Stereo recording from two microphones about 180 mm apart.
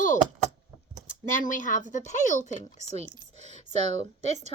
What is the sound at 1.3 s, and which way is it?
Speech, 45° left (ahead or behind).